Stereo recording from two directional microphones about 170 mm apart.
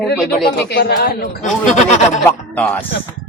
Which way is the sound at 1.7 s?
45° left (ahead or behind).